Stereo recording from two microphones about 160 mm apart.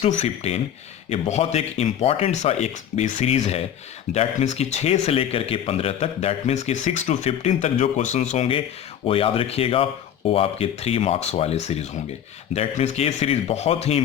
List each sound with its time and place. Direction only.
0.0 s speech: 40° left (ahead or behind)